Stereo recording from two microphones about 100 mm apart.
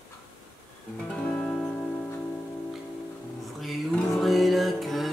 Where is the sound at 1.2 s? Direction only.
10° left (ahead or behind).